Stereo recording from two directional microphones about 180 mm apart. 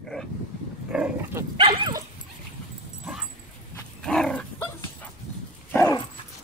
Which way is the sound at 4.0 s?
5° left (ahead or behind).